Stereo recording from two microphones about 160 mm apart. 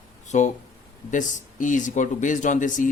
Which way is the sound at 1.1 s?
55° left (ahead or behind).